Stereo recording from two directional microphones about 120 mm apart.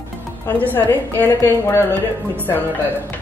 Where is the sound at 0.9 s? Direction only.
15° left (ahead or behind).